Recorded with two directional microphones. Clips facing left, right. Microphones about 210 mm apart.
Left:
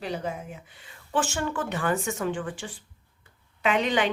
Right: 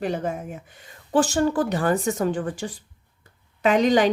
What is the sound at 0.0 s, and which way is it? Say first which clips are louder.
Speech: right 5 dB; 50° right (ahead or behind).